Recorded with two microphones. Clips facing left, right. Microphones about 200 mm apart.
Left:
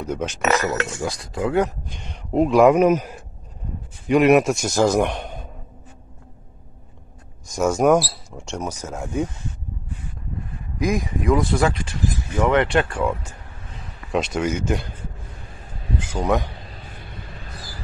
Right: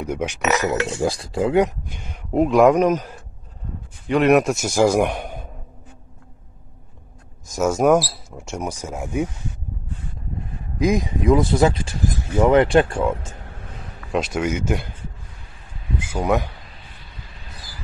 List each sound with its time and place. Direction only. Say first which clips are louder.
0.0 s a man's voice: even; 15° right (ahead or behind)
1.0 s speech: right 4 dB; 30° right (ahead or behind)
1.9 s a man's voice: even; 5° right (ahead or behind)
7.4 s speech: even; centre (ahead or behind)
10.8 s speech: right 3 dB; 20° right (ahead or behind)
12.4 s speech: right 4 dB; 30° right (ahead or behind)
14.1 s speech: even; centre (ahead or behind)
16.0 s a man's voice: right 1 dB; 10° right (ahead or behind)
16.9 s vehicle: left 6 dB; 55° left (ahead or behind)